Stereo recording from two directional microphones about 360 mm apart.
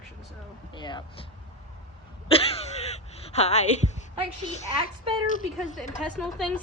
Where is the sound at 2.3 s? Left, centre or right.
Centre.